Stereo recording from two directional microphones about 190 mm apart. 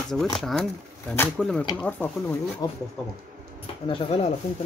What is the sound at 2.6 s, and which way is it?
Speech, 20° left (ahead or behind).